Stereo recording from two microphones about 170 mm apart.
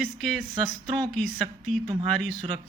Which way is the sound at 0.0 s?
5° left (ahead or behind).